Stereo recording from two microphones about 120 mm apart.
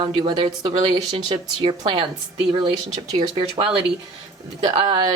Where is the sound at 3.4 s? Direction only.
45° right (ahead or behind).